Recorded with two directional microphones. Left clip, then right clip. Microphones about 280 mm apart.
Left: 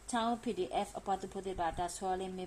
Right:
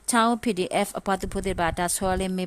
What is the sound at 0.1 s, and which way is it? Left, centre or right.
A woman's voice, right.